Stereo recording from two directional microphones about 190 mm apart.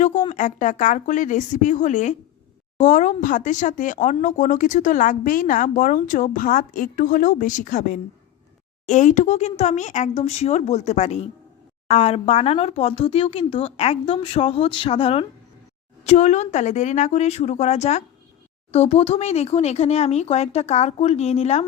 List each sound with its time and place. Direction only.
0.3 s speech: 40° left (ahead or behind)